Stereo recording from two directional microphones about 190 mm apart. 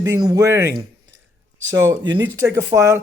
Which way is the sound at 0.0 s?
15° right (ahead or behind).